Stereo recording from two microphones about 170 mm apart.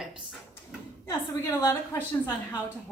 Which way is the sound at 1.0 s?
20° left (ahead or behind).